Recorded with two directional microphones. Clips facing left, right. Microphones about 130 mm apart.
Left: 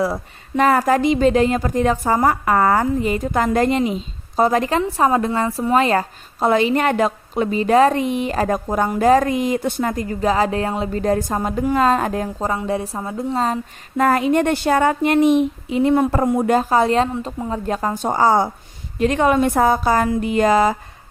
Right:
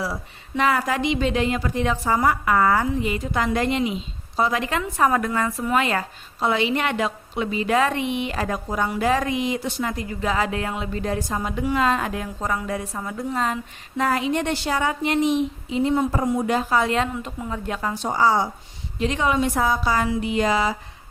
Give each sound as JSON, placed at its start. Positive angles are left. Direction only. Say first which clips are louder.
{"t": 0.0, "sound": "a woman's voice", "louder": "left 8 dB", "side_deg": 45}
{"t": 14.0, "sound": "a woman's voice", "louder": "left 6 dB", "side_deg": 50}